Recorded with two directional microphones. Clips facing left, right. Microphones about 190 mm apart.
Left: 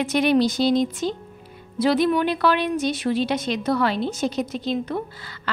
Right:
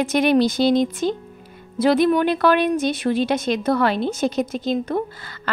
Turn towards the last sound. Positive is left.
turn(degrees=-50)  # may be behind; listen again after turning